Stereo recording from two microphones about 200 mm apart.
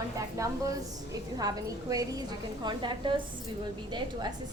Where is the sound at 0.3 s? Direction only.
15° right (ahead or behind).